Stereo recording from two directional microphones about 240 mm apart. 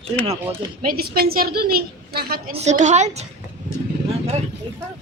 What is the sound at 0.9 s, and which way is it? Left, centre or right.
A woman's voice, right.